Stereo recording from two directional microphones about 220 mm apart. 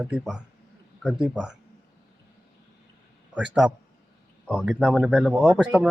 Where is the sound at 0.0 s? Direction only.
5° right (ahead or behind).